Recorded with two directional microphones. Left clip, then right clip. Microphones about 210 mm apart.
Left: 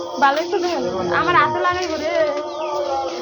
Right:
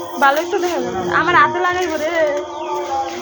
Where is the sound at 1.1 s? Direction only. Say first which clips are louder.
Right 3 dB; 40° right (ahead or behind).